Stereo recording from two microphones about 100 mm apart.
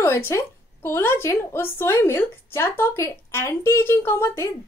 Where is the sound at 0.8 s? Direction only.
25° left (ahead or behind).